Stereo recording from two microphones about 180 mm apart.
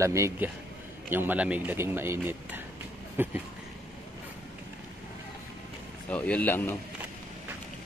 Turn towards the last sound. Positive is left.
turn(degrees=10)  # may be behind; listen again after turning